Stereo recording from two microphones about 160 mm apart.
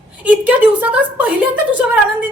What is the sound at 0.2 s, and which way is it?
A woman's voice, 10° right (ahead or behind).